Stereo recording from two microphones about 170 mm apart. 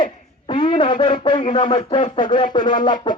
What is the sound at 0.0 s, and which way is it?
Speech, 30° left (ahead or behind).